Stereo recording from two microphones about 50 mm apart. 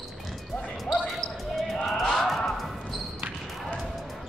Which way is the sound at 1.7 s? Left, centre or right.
Centre.